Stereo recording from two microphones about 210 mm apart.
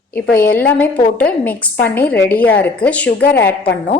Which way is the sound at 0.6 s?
5° left (ahead or behind).